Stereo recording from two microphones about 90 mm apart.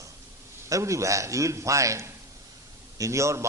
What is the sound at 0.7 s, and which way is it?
A man's voice, 35° right (ahead or behind).